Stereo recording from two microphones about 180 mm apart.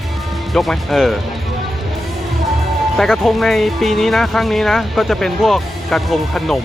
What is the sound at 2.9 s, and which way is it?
Speech, centre (ahead or behind).